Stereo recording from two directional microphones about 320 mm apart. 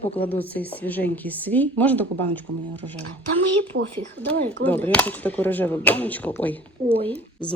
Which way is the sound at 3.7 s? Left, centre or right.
Right.